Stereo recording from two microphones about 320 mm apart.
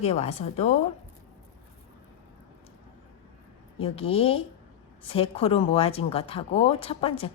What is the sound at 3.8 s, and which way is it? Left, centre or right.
Speech, centre.